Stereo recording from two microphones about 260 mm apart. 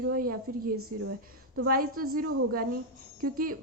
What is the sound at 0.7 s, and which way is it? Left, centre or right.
Speech, right.